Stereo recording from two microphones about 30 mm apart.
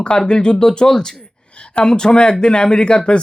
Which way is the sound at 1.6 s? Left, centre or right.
Left.